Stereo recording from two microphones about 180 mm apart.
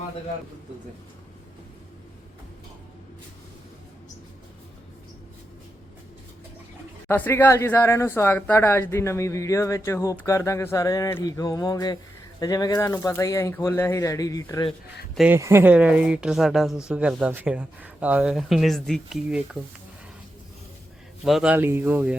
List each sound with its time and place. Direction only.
7.1 s speech: 10° left (ahead or behind)
15.3 s speech: 15° right (ahead or behind); by 19.4 s centre (ahead or behind)
21.2 s speech: 5° right (ahead or behind)